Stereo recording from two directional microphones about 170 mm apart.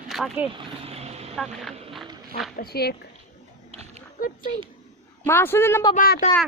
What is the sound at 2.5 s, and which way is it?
Speech, 65° left (ahead or behind).